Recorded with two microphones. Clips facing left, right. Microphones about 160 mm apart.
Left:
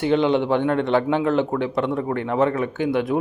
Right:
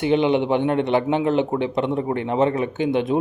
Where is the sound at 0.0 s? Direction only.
20° right (ahead or behind).